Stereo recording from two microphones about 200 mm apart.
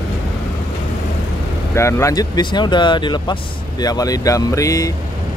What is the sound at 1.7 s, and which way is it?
Speech, 15° left (ahead or behind).